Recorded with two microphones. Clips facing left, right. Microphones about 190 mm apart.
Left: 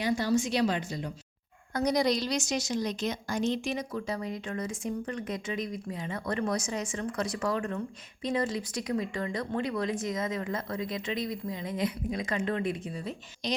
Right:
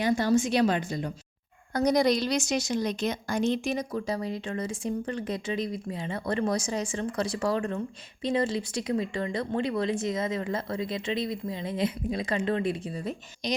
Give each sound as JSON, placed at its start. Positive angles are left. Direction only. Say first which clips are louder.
{"t": 0.0, "sound": "a woman's voice", "louder": "right 3 dB", "side_deg": -50}
{"t": 13.4, "sound": "a woman's voice", "louder": "right 2 dB", "side_deg": -15}